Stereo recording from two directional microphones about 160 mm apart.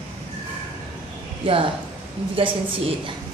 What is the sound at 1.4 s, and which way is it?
A woman's voice, 30° right (ahead or behind).